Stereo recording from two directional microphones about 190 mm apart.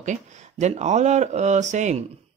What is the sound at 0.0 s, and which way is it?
Speech, 40° right (ahead or behind).